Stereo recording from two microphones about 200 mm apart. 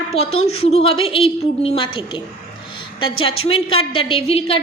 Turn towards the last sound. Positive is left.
turn(degrees=30)  # may be behind; listen again after turning